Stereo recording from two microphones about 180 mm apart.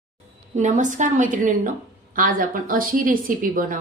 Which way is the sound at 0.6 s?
45° right (ahead or behind).